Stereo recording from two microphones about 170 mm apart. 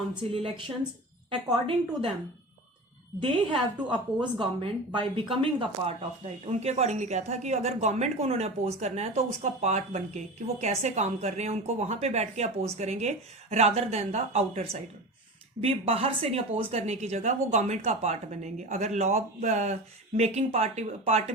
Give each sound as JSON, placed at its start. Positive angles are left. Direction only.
{"t": 0.2, "sound": "speech", "side_deg": -35}
{"t": 3.5, "sound": "a woman's voice", "side_deg": -30}